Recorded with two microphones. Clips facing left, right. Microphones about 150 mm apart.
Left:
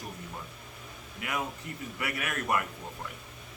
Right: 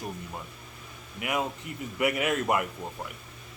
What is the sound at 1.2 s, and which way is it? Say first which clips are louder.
A man's voice: right 4 dB; 20° right (ahead or behind).